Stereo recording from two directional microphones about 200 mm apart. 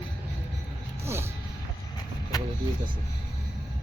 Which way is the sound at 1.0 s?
10° right (ahead or behind).